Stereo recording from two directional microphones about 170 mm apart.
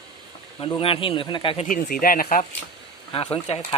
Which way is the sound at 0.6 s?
35° left (ahead or behind).